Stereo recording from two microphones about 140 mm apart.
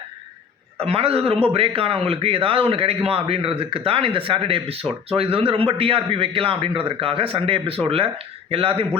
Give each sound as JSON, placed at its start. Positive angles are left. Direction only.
{"t": 0.8, "sound": "a man's voice", "side_deg": -45}